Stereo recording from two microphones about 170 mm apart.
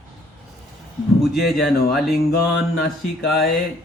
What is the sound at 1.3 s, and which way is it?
Speech, centre (ahead or behind).